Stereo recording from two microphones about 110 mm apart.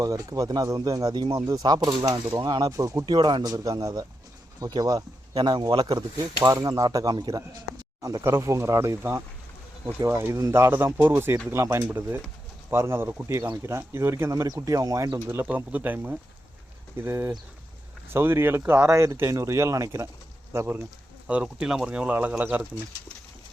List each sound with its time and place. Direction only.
0.0 s speech: 30° right (ahead or behind)
2.7 s speech: 30° right (ahead or behind)
3.1 s speech: 45° right (ahead or behind)
8.0 s speech: 30° right (ahead or behind)
15.4 s speech: 15° right (ahead or behind)
21.2 s speech: 10° right (ahead or behind)